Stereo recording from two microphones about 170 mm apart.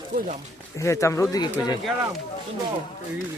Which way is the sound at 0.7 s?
15° left (ahead or behind).